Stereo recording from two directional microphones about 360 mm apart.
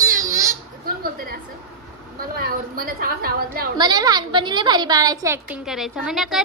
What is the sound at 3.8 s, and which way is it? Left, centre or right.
A woman's voice, centre.